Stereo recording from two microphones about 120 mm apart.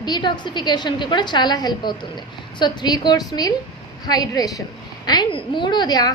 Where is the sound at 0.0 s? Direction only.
40° left (ahead or behind).